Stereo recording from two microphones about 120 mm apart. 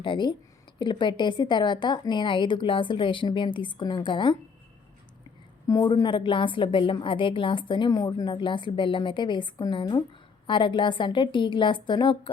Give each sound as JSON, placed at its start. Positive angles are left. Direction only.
{"t": 0.0, "sound": "a woman's voice", "side_deg": 40}
{"t": 5.6, "sound": "speech", "side_deg": 30}
{"t": 5.9, "sound": "a woman's voice", "side_deg": 40}